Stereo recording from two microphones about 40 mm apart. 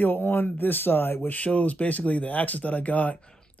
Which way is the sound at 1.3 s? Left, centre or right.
Left.